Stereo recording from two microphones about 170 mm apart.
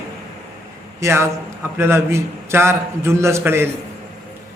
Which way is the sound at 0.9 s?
15° right (ahead or behind).